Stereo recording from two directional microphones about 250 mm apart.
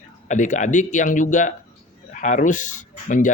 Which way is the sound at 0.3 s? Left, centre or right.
Left.